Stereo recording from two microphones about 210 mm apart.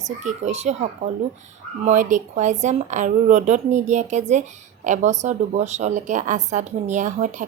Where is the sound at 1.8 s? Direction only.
35° right (ahead or behind).